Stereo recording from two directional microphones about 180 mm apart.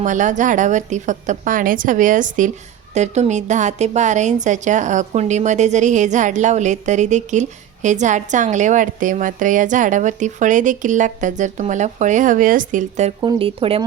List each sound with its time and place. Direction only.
0.0 s a woman's voice: 45° right (ahead or behind)
13.2 s speech: 30° right (ahead or behind)